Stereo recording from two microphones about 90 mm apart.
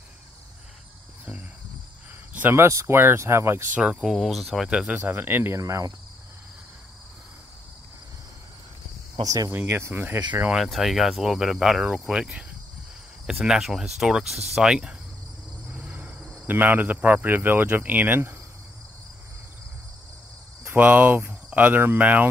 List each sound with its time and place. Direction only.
2.3 s speech: 25° right (ahead or behind)
3.7 s speech: 10° right (ahead or behind)
5.6 s cricket: 40° right (ahead or behind)
9.2 s speech: 45° right (ahead or behind)
9.6 s speech: 25° right (ahead or behind)
10.5 s cricket: 5° right (ahead or behind); by 18.3 s 20° right (ahead or behind)
20.7 s speech: 15° right (ahead or behind)